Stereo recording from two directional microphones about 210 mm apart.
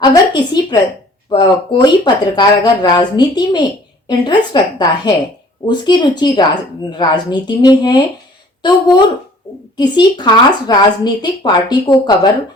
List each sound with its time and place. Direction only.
0.0 s speech: 20° left (ahead or behind)